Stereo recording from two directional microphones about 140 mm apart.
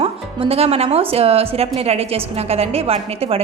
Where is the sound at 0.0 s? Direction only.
45° right (ahead or behind).